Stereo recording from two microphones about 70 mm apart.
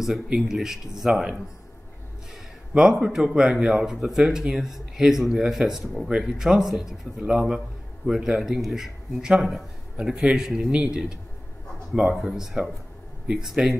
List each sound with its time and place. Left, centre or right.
0.0 s a man's voice: centre
2.7 s a man's voice: centre